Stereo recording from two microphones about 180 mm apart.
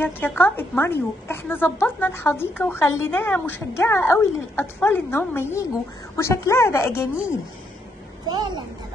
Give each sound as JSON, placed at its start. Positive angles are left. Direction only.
{"t": 0.0, "sound": "a woman's voice", "side_deg": 10}
{"t": 8.3, "sound": "a child's voice", "side_deg": -25}